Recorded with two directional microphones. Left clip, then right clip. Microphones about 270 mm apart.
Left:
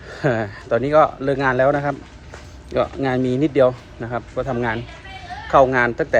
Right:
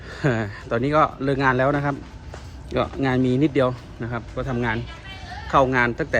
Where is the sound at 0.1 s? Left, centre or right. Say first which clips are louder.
Left 4 dB; centre.